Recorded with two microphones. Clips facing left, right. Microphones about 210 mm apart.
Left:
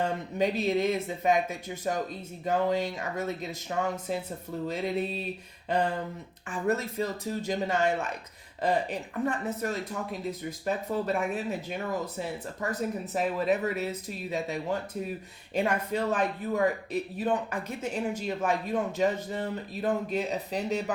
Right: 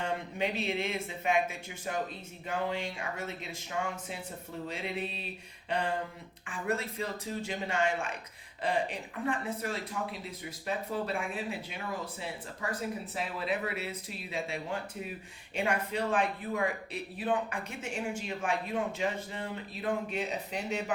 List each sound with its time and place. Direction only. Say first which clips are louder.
0.0 s speech: left 5 dB; 40° left (ahead or behind)
6.5 s speech: left 5 dB; 40° left (ahead or behind)